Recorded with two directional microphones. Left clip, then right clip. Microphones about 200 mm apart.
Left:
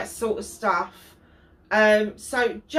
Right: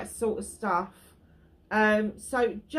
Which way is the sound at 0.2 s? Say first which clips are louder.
Left 3 dB; 45° right (ahead or behind).